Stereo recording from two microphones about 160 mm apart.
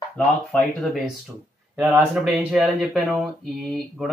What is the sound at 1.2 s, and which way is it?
Speech, 5° right (ahead or behind).